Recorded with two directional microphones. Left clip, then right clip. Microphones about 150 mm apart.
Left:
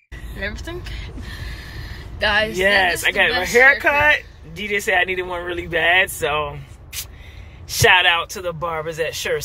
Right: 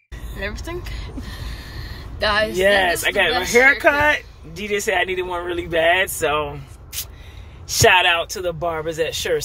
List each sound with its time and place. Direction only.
0.4 s speech: 15° right (ahead or behind)
1.8 s a sound: 10° right (ahead or behind)
2.5 s speech: 35° right (ahead or behind)
7.6 s speech: 35° right (ahead or behind)